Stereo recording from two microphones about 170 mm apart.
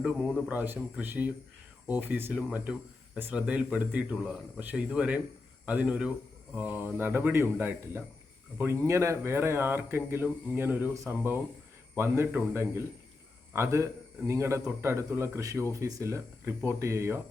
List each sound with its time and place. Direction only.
0.1 s speech: centre (ahead or behind)
0.5 s speech: 10° right (ahead or behind)